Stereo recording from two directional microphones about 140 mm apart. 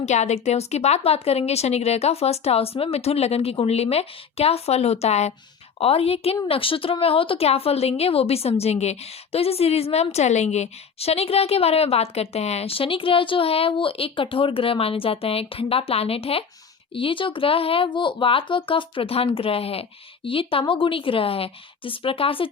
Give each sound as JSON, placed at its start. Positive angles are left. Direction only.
{"t": 0.0, "sound": "a woman's voice", "side_deg": 55}